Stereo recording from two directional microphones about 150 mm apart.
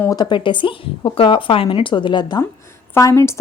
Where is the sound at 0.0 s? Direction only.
25° left (ahead or behind).